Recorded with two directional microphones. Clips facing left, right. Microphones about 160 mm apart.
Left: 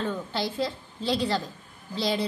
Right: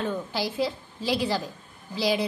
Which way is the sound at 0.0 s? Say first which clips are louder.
Right 1 dB; 10° right (ahead or behind).